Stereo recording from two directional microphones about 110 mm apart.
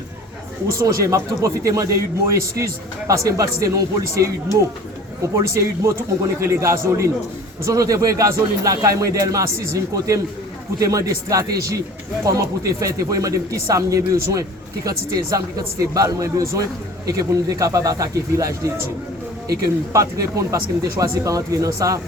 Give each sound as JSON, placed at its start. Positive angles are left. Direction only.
{"t": 0.8, "sound": "a man's voice", "side_deg": -30}
{"t": 12.8, "sound": "a man's voice", "side_deg": -30}